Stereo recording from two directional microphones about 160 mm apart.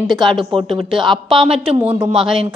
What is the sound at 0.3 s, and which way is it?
Speech, 30° right (ahead or behind).